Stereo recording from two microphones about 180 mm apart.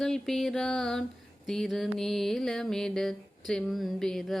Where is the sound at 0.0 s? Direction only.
Centre (ahead or behind).